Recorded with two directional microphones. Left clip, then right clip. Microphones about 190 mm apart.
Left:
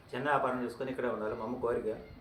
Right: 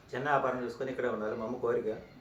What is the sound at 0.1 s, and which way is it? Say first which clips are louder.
Speech: right 1 dB; 10° left (ahead or behind).